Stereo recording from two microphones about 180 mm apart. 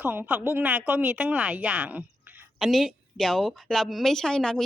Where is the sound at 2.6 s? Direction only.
Centre (ahead or behind).